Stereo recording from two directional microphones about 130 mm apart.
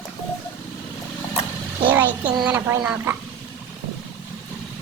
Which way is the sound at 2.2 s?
35° right (ahead or behind).